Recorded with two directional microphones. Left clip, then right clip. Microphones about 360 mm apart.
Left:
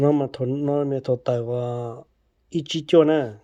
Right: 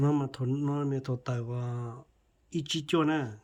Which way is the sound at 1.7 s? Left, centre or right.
Left.